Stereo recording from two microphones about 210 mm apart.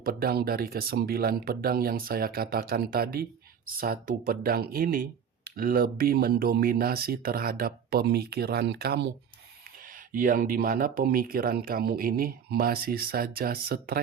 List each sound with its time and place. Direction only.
0.0 s speech: 45° right (ahead or behind)
10.1 s speech: 40° right (ahead or behind)